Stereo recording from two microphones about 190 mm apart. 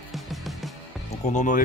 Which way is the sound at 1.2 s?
40° left (ahead or behind).